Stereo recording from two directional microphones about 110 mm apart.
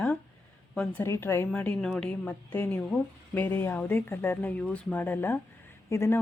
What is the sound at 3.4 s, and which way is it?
Speech, 20° left (ahead or behind).